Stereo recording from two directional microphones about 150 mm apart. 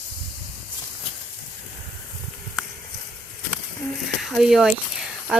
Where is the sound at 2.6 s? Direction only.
5° right (ahead or behind).